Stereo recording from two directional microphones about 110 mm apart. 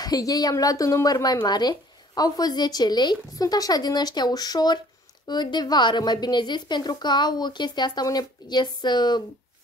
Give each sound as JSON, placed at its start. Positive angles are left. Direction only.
{"t": 0.0, "sound": "a woman's voice", "side_deg": 35}